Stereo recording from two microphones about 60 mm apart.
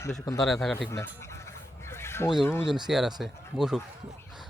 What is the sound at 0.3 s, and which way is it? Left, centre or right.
Speech, centre.